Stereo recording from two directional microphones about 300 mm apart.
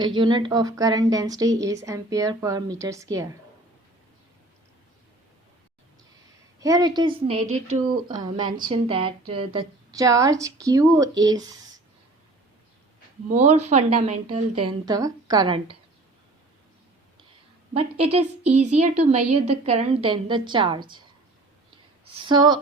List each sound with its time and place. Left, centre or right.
0.0 s a woman's voice: centre
6.6 s a woman's voice: centre
13.3 s a woman's voice: right
17.7 s a woman's voice: centre
18.2 s speech: right
18.8 s a woman's voice: right
22.0 s speech: centre